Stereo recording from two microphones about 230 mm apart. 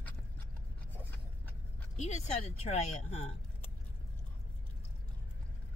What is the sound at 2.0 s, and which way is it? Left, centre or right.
Speech, left.